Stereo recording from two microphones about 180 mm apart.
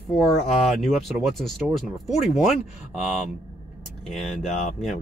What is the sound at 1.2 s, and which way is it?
Speech, centre (ahead or behind).